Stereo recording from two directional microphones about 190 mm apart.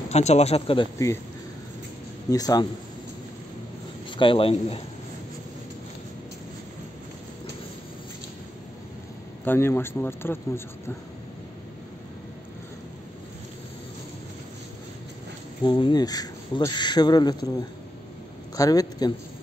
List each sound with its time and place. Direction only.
0.1 s speech: 35° left (ahead or behind)
2.3 s speech: 20° left (ahead or behind)
4.2 s speech: 30° left (ahead or behind)
9.4 s speech: 10° left (ahead or behind)
15.6 s speech: 25° left (ahead or behind)